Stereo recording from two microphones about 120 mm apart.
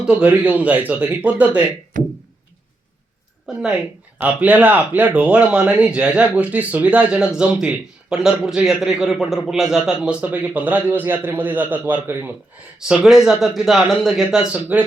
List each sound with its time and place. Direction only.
0.0 s speech: 10° right (ahead or behind)
2.0 s a sound: 90° right
3.4 s speech: 5° right (ahead or behind)
12.9 s a man's voice: 5° right (ahead or behind)